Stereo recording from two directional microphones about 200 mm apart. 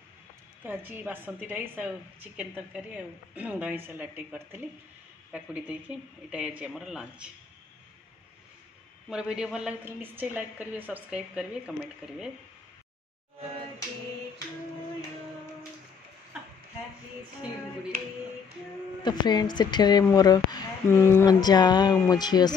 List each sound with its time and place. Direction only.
0.7 s a woman's voice: 10° right (ahead or behind)
9.1 s a woman's voice: 5° right (ahead or behind)
19.0 s a woman's voice: 20° left (ahead or behind)